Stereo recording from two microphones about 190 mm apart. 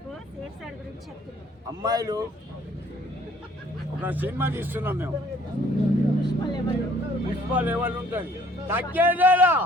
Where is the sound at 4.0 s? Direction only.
10° right (ahead or behind).